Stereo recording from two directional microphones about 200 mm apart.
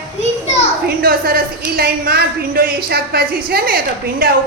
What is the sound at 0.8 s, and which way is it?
A woman's voice, 50° right (ahead or behind).